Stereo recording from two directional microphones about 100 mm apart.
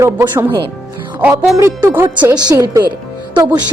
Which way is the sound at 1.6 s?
25° right (ahead or behind).